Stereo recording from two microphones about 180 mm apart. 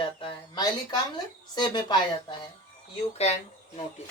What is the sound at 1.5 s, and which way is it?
Speech, 25° left (ahead or behind).